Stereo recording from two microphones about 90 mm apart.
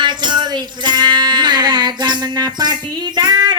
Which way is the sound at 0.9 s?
50° right (ahead or behind).